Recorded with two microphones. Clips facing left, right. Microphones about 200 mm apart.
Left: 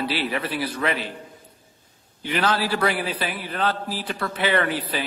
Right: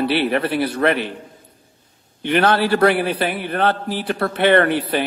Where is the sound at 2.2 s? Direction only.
60° right (ahead or behind).